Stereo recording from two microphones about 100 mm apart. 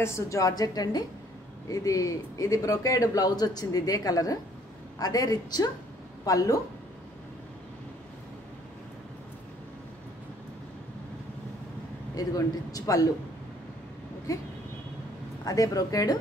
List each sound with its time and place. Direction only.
0.0 s a man's voice: 30° left (ahead or behind)
12.2 s a man's voice: 35° left (ahead or behind)
15.4 s a man's voice: 35° left (ahead or behind)